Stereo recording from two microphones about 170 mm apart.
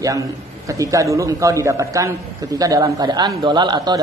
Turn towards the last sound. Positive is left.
turn(degrees=-25)  # may be behind; listen again after turning